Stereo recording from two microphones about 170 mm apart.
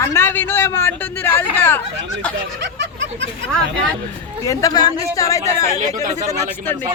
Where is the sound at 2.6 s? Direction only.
90° right.